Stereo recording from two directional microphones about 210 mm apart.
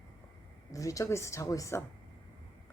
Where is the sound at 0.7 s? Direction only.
15° left (ahead or behind).